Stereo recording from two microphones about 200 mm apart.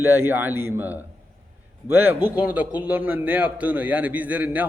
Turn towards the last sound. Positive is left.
turn(degrees=-10)  # may be behind; listen again after turning